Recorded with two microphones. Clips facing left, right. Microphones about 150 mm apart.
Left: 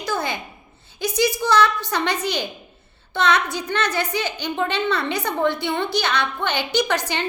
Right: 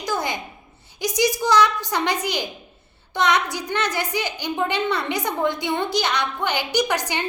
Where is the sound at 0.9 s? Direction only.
15° right (ahead or behind).